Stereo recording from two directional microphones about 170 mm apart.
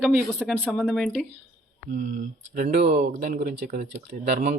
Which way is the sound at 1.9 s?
50° right (ahead or behind).